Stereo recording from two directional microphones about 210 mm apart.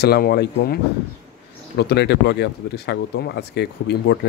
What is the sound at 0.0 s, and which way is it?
Speech, 50° left (ahead or behind).